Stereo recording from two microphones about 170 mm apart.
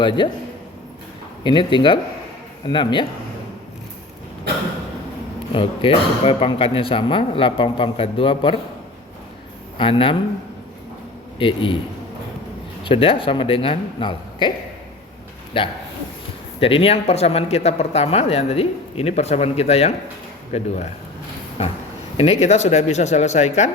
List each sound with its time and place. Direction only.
0.2 s speech: 30° left (ahead or behind)
1.5 s speech: 30° left (ahead or behind)
5.5 s speech: 30° left (ahead or behind)
9.7 s speech: 30° left (ahead or behind)
11.3 s speech: 30° left (ahead or behind)
12.8 s speech: 30° left (ahead or behind)
15.6 s speech: 30° left (ahead or behind)